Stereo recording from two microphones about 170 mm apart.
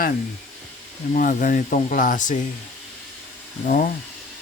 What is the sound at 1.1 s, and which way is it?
Speech, 50° left (ahead or behind).